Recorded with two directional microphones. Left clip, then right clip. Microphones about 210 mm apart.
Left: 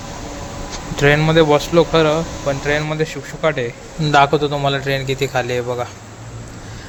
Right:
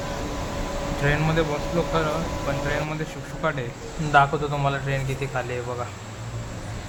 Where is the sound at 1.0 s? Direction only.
35° left (ahead or behind).